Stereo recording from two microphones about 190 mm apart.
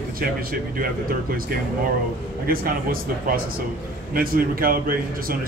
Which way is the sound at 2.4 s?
50° right (ahead or behind).